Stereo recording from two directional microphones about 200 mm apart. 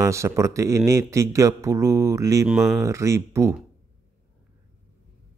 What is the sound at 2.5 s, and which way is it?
Speech, centre (ahead or behind).